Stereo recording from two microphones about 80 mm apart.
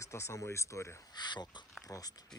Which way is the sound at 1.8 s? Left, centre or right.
Left.